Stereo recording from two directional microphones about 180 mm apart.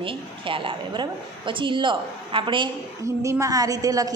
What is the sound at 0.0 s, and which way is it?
A woman's voice, 30° right (ahead or behind).